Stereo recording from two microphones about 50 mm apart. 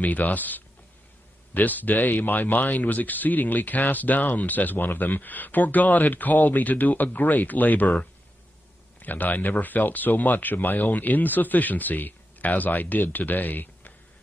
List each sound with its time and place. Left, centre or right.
0.0 s speech: left